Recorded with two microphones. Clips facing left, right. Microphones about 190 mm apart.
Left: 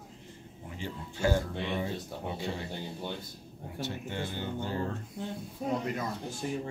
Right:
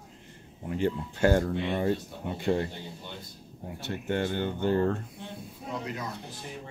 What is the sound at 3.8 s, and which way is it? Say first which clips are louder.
Speech: right 8 dB; 60° right (ahead or behind).